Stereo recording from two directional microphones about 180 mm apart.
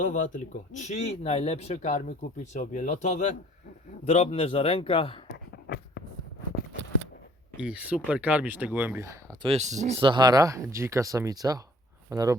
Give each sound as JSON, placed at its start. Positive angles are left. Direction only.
{"t": 0.0, "sound": "speech", "side_deg": 45}
{"t": 5.3, "sound": "a sound", "side_deg": 70}
{"t": 7.6, "sound": "speech", "side_deg": -5}
{"t": 9.4, "sound": "speech", "side_deg": -35}